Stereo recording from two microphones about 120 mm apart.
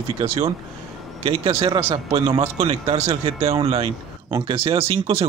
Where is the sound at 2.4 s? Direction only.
65° right (ahead or behind).